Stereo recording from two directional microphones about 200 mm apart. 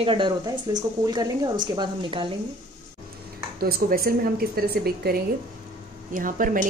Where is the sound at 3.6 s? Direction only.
50° right (ahead or behind).